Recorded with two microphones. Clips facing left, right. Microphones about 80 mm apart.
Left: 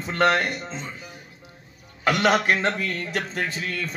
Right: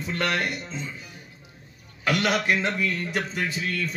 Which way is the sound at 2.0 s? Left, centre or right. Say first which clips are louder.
Left 4 dB; left.